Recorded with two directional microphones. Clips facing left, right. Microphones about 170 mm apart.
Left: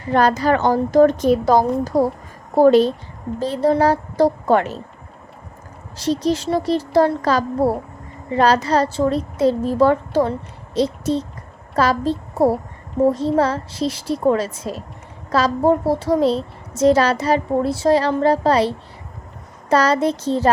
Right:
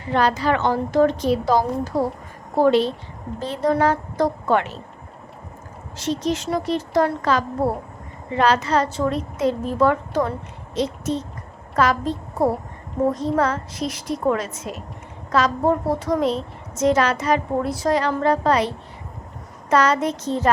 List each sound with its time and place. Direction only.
0.1 s a woman's voice: 45° left (ahead or behind)
6.0 s a woman's voice: 35° left (ahead or behind)
19.7 s a woman's voice: 35° left (ahead or behind)